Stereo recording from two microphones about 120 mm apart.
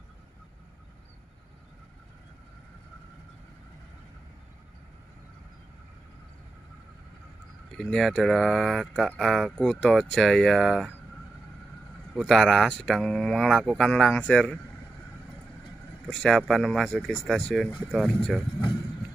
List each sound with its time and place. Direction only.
7.7 s speech: 5° left (ahead or behind)
12.1 s speech: centre (ahead or behind)
16.1 s speech: 5° left (ahead or behind)